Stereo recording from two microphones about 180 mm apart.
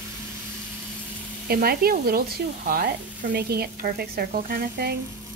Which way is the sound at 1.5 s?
60° right (ahead or behind).